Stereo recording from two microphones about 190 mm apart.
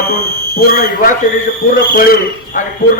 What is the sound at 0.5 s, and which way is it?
A man's voice, 50° left (ahead or behind).